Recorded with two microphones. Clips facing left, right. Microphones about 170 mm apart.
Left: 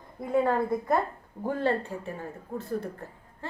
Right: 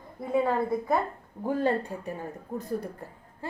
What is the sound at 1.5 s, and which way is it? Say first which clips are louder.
Speech: right 1 dB; 15° right (ahead or behind).